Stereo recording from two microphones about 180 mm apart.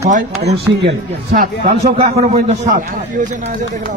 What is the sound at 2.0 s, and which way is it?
Speech, 35° right (ahead or behind).